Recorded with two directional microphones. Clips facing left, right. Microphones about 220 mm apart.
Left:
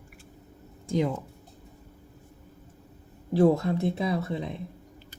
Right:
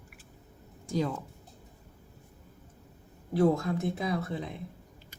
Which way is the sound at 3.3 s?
25° left (ahead or behind).